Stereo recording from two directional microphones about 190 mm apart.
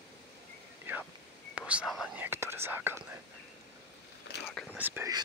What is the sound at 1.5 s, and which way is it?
Whispering, 5° right (ahead or behind).